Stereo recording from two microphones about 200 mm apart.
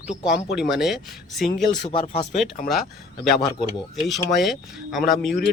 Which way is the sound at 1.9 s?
25° left (ahead or behind).